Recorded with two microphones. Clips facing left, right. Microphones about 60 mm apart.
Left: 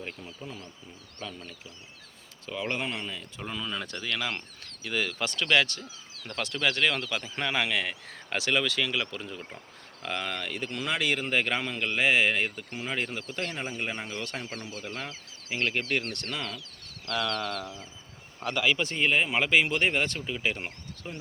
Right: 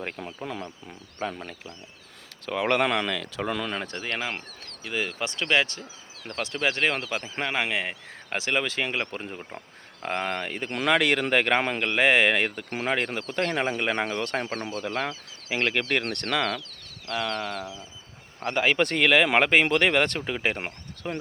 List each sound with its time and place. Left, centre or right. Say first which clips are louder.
0.2 s speech: right 7 dB; right
2.5 s speech: right 8 dB; right
4.2 s a man's voice: right 1 dB; centre
6.1 s speech: right 2 dB; centre
6.4 s a man's voice: right 1 dB; centre
7.6 s speech: right 1 dB; right
10.7 s speech: right 7 dB; right
14.2 s speech: right 7 dB; right
17.1 s speech: right 1 dB; right
18.7 s speech: right 6 dB; right